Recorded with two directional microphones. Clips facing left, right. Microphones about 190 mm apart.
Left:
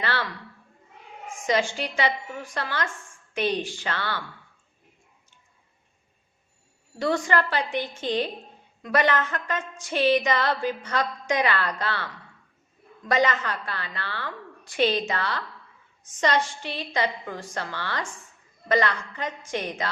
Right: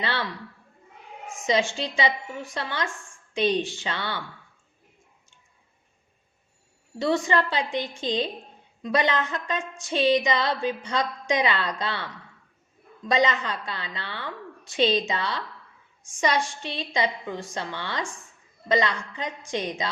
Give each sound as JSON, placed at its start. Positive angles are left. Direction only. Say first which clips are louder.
{"t": 0.0, "sound": "a woman's voice", "louder": "even", "side_deg": -20}
{"t": 1.5, "sound": "a woman's voice", "louder": "even", "side_deg": -20}
{"t": 7.0, "sound": "a woman's voice", "louder": "right 1 dB", "side_deg": -20}
{"t": 13.1, "sound": "a woman's voice", "louder": "even", "side_deg": -20}